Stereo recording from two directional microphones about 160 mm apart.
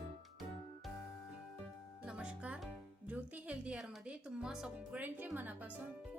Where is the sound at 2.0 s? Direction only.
5° right (ahead or behind).